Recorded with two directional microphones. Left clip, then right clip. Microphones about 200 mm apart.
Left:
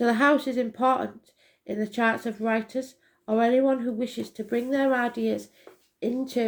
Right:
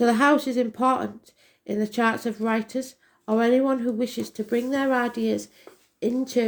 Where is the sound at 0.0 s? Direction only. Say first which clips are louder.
Right 2 dB; 40° right (ahead or behind).